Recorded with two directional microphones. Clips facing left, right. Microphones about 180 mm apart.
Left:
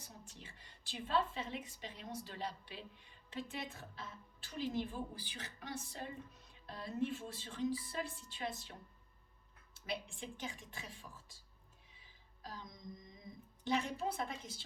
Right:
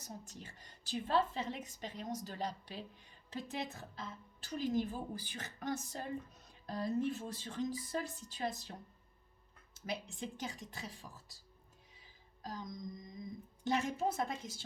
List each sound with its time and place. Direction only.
0.0 s a woman's voice: 45° right (ahead or behind)
9.7 s a woman's voice: 45° right (ahead or behind)
11.9 s music: 45° right (ahead or behind)
13.7 s a woman's voice: 45° right (ahead or behind)